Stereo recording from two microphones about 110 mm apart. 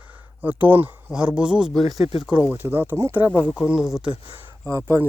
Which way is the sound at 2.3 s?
15° right (ahead or behind).